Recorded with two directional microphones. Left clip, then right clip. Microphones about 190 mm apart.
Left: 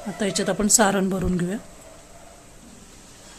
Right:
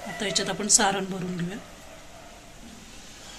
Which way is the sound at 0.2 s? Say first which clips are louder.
Left 4 dB; 45° left (ahead or behind).